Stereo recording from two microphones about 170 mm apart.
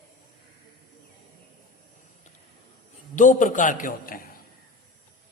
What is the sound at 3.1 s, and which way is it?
A man's voice, 50° left (ahead or behind).